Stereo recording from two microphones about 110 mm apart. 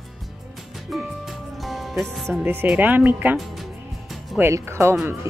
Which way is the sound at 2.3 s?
20° right (ahead or behind).